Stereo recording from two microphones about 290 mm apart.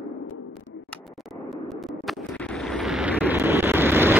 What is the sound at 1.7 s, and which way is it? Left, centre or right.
Vehicle, centre.